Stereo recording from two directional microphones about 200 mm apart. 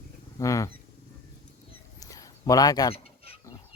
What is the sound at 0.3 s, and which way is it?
Speech, 15° left (ahead or behind).